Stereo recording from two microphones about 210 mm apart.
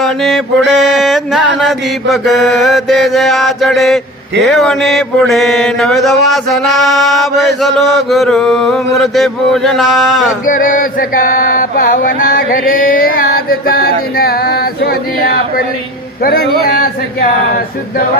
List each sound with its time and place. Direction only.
0.0 s mantra: centre (ahead or behind)
10.4 s chant: 40° left (ahead or behind)